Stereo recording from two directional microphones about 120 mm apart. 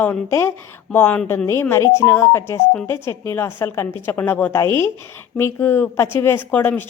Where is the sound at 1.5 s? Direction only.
20° left (ahead or behind).